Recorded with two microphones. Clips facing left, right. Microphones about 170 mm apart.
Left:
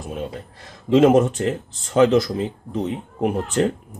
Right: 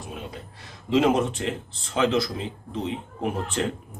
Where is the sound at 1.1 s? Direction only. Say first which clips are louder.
Left 7 dB; 45° left (ahead or behind).